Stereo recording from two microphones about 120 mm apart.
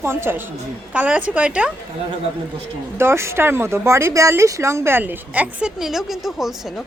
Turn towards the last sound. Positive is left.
turn(degrees=0)  # may be behind; listen again after turning